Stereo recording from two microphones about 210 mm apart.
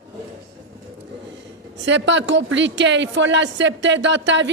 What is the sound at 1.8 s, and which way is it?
A woman's voice, 60° right (ahead or behind).